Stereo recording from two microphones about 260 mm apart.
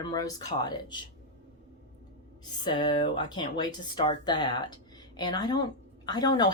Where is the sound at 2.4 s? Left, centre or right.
Centre.